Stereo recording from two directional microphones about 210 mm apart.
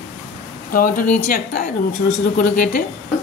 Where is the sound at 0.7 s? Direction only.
40° left (ahead or behind).